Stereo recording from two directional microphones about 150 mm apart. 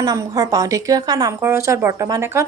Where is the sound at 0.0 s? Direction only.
25° right (ahead or behind).